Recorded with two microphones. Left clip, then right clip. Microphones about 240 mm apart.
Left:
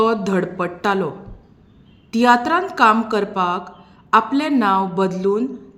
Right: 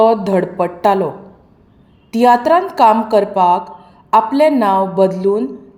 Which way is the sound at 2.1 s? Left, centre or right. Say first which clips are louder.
Right 5 dB; centre.